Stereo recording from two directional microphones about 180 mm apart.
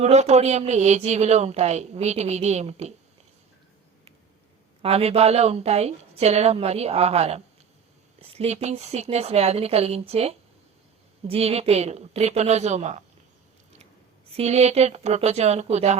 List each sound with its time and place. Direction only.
0.0 s speech: 40° right (ahead or behind)
4.8 s speech: 35° right (ahead or behind)
14.3 s speech: 35° right (ahead or behind)